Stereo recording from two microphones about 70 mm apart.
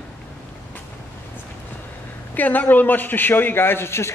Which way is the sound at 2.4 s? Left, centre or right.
Left.